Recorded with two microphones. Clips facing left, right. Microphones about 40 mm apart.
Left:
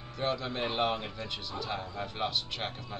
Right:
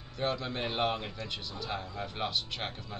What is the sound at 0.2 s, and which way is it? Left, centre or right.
Speech, centre.